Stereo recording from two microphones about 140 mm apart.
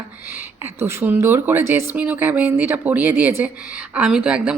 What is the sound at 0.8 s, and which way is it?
Speech, 15° right (ahead or behind).